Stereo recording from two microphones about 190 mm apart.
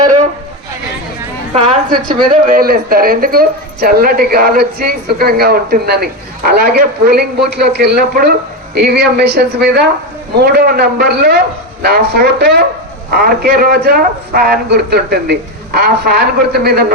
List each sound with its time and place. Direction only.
2.3 s a woman's voice: 50° right (ahead or behind)